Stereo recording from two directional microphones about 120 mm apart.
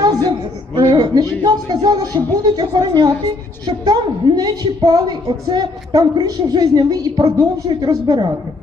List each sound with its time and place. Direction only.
0.0 s a woman's voice: 35° right (ahead or behind)